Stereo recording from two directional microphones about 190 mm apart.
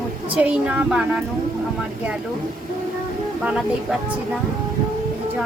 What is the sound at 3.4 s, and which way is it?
Speech, 5° right (ahead or behind).